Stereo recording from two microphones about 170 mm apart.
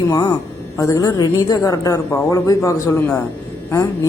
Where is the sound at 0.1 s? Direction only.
20° left (ahead or behind).